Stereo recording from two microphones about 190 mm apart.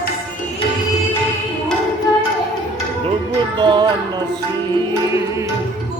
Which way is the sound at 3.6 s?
25° right (ahead or behind).